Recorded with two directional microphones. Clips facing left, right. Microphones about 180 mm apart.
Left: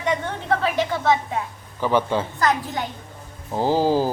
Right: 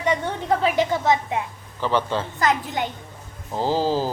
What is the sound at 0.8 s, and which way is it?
Speech, 15° right (ahead or behind).